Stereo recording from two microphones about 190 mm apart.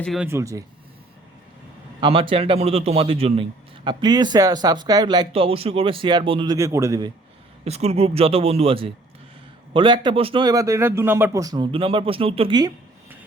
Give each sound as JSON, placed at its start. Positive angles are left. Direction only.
{"t": 0.0, "sound": "speech", "side_deg": 0}
{"t": 0.3, "sound": "speech", "side_deg": -15}
{"t": 2.0, "sound": "speech", "side_deg": -25}
{"t": 7.6, "sound": "speech", "side_deg": -35}